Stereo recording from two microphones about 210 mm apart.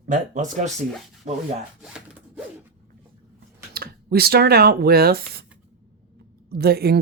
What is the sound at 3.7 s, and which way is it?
Speech, 45° right (ahead or behind).